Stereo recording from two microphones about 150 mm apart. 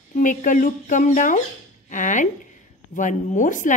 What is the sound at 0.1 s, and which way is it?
A woman's voice, 60° left (ahead or behind).